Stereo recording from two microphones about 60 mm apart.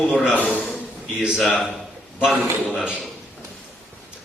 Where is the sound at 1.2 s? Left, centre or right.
Centre.